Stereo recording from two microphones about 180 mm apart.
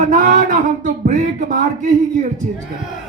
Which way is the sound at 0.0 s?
45° right (ahead or behind).